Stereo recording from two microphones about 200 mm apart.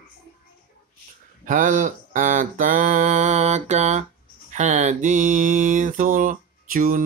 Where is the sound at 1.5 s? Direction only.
40° right (ahead or behind).